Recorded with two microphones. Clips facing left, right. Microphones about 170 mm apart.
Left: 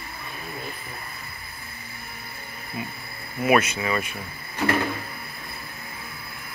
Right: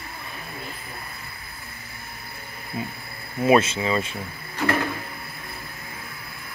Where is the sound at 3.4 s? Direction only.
25° right (ahead or behind).